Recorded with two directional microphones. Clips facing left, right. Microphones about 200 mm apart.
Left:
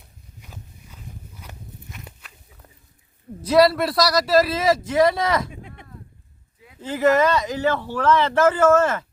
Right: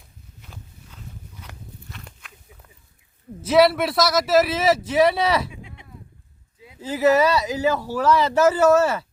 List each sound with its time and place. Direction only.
1.4 s walk: 10° left (ahead or behind)
3.5 s a man's voice: centre (ahead or behind)
5.5 s a sound: 50° left (ahead or behind)
6.7 s speech: 10° right (ahead or behind)